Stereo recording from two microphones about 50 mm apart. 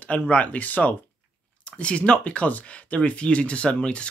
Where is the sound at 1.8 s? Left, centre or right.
Left.